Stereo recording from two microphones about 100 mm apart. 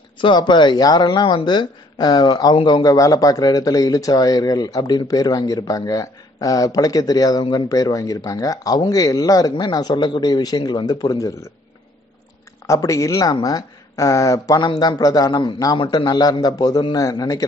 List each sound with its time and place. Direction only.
0.2 s a man's voice: 50° left (ahead or behind)
12.6 s a man's voice: 35° left (ahead or behind)